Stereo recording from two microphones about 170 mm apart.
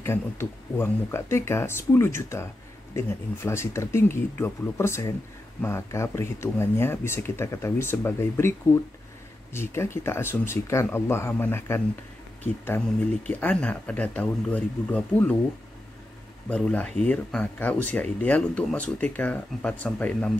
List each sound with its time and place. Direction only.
0.0 s speech: 15° left (ahead or behind)
3.4 s speech: 15° left (ahead or behind)
13.3 s speech: 10° left (ahead or behind)
16.4 s speech: 5° left (ahead or behind)